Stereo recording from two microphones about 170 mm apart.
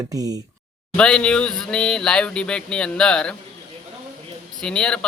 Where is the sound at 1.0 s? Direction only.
5° left (ahead or behind).